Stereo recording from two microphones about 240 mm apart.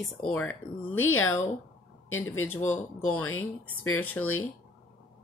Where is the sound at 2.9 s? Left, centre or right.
Left.